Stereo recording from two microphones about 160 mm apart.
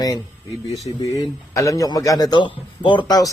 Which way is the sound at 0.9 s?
20° left (ahead or behind).